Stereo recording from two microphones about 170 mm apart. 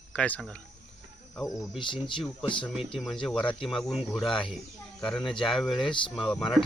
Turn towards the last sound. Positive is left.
turn(degrees=5)  # may be behind; listen again after turning